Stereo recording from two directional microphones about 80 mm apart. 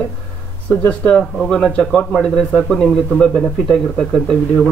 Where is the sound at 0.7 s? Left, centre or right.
Centre.